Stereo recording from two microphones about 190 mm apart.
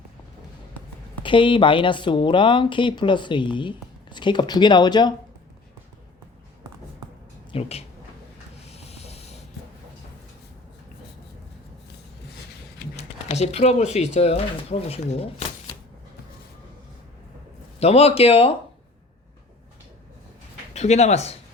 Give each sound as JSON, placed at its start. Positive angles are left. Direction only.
{"t": 1.2, "sound": "speech", "side_deg": 25}
{"t": 7.5, "sound": "speech", "side_deg": 30}
{"t": 8.6, "sound": "hiss", "side_deg": 35}
{"t": 13.0, "sound": "speech", "side_deg": 35}
{"t": 17.7, "sound": "speech", "side_deg": 35}
{"t": 20.7, "sound": "speech", "side_deg": 35}